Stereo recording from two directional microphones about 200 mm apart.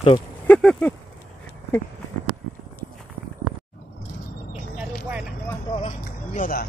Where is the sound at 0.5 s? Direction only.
5° left (ahead or behind).